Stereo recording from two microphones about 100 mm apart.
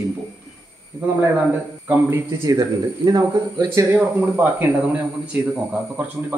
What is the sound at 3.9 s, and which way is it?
A man's voice, 15° right (ahead or behind).